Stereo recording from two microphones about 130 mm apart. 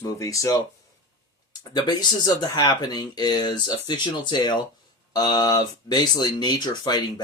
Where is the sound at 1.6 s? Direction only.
30° left (ahead or behind).